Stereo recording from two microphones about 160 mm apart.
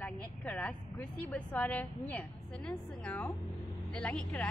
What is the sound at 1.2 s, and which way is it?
A woman's voice, 10° left (ahead or behind).